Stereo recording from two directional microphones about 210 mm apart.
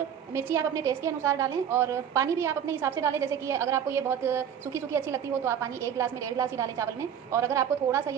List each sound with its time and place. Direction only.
0.4 s a woman's voice: 15° right (ahead or behind)